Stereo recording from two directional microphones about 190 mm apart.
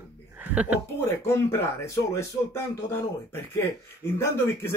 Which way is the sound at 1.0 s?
15° left (ahead or behind).